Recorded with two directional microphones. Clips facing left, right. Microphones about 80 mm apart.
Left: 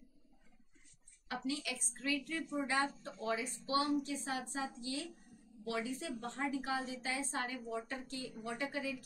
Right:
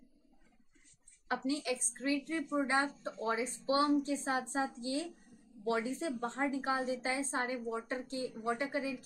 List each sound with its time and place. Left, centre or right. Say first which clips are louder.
1.3 s a woman's voice: right 6 dB; right